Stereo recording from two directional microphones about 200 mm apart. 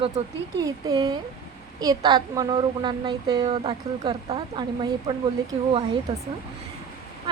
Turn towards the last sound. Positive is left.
turn(degrees=-25)  # may be behind; listen again after turning